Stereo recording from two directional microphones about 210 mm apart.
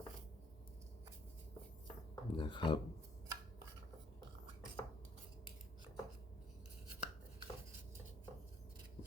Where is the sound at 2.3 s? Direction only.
25° left (ahead or behind).